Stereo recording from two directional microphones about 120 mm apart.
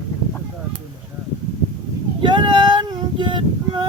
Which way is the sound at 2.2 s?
40° right (ahead or behind).